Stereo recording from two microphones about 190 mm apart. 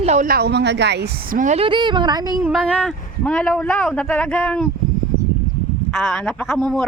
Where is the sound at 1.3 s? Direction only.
40° right (ahead or behind).